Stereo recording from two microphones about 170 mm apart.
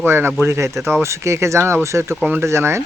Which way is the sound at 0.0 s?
10° right (ahead or behind).